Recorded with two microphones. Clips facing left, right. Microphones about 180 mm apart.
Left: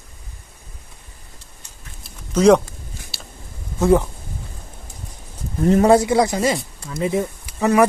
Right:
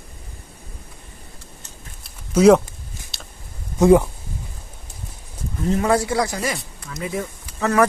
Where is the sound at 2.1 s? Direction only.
5° right (ahead or behind).